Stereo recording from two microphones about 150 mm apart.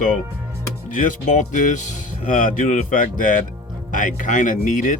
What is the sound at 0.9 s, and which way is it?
Speech, 60° left (ahead or behind).